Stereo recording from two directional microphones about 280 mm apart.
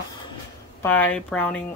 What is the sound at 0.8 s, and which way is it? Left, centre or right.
Speech, centre.